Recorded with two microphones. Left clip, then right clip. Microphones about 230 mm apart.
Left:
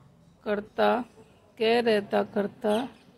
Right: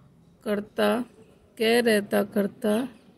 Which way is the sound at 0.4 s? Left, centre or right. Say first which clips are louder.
Even; right.